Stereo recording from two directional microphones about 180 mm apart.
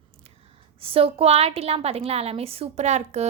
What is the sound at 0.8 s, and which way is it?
A woman's voice, 30° right (ahead or behind).